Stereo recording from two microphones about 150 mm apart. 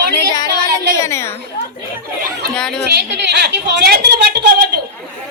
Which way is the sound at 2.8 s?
90° right.